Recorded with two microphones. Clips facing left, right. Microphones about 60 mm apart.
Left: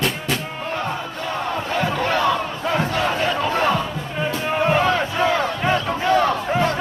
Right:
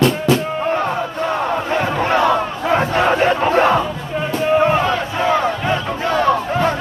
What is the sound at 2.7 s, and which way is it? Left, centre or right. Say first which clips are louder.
Crowd: right 6 dB; right.